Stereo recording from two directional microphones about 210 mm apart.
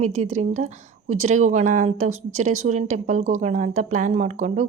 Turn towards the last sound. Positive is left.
turn(degrees=-35)  # may be behind; listen again after turning